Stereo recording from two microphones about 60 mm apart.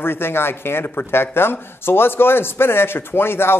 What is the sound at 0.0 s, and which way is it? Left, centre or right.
A man's voice, left.